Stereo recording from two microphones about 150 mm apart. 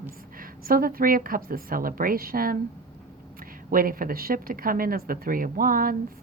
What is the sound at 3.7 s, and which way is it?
A woman's voice, 70° right (ahead or behind).